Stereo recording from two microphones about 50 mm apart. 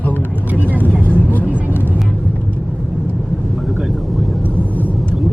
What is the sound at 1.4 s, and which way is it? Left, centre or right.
Vehicle, right.